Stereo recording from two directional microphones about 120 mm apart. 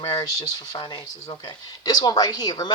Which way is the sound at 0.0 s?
30° left (ahead or behind).